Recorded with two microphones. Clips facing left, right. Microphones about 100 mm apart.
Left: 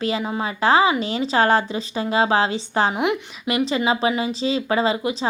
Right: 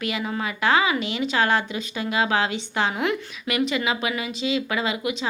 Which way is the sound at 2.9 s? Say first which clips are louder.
Left 3 dB; 20° left (ahead or behind).